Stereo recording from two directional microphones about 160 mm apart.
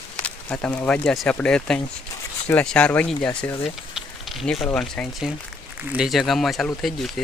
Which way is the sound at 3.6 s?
Centre (ahead or behind).